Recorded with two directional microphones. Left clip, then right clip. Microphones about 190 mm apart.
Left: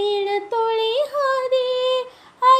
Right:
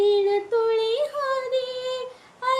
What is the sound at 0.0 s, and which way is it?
Female singing, 25° left (ahead or behind).